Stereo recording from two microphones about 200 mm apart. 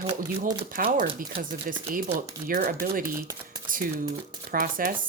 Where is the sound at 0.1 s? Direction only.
15° right (ahead or behind).